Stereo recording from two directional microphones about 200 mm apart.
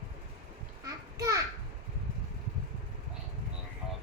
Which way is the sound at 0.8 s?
15° right (ahead or behind).